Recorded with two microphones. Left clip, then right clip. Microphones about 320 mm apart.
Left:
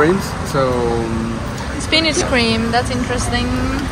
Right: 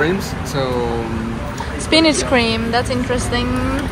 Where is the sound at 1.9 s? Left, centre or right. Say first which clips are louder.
Right 2 dB; centre.